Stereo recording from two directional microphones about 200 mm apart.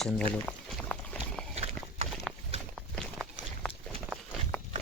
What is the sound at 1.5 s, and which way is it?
Horse, 30° right (ahead or behind).